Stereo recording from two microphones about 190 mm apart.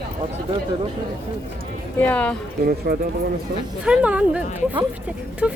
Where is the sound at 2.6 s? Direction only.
50° right (ahead or behind).